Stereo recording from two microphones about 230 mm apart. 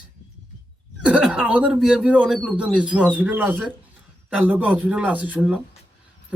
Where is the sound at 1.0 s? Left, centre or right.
Centre.